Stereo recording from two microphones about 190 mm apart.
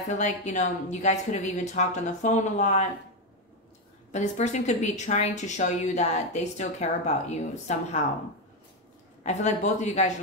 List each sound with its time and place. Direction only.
0.1 s a woman's voice: 40° left (ahead or behind)
4.1 s a woman's voice: 40° left (ahead or behind)
9.2 s a woman's voice: 40° left (ahead or behind)